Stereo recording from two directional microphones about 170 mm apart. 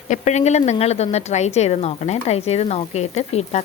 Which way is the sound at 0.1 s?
40° left (ahead or behind).